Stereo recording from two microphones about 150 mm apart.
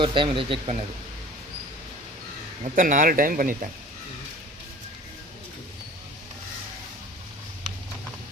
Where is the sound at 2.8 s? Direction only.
65° right (ahead or behind).